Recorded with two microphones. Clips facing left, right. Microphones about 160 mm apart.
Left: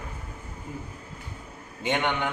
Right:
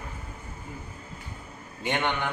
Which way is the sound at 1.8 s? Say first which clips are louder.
Left 2 dB; 15° left (ahead or behind).